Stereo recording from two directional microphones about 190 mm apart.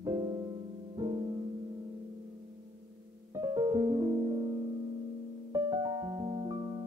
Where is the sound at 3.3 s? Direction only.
15° right (ahead or behind).